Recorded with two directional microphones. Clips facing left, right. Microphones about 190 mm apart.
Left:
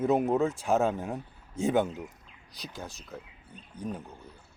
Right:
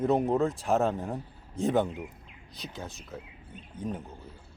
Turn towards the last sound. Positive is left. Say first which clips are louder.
# right 1 dB
turn(degrees=0)  # may be behind; listen again after turning